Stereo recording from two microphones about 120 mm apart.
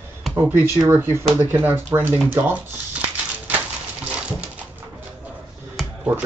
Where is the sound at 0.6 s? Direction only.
20° right (ahead or behind).